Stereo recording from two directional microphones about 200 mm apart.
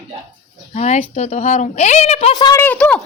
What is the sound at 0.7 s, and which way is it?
A woman's voice, 35° left (ahead or behind).